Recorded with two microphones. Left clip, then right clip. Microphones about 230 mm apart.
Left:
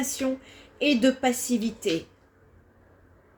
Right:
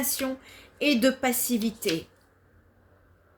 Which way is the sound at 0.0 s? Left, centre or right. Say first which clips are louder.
Left 2 dB; right.